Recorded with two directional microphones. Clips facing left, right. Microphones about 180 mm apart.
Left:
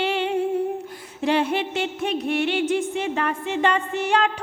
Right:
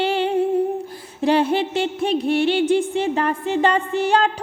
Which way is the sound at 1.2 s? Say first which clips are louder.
Right 4 dB; 35° right (ahead or behind).